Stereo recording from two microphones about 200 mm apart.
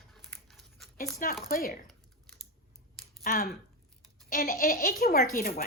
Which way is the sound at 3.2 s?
45° left (ahead or behind).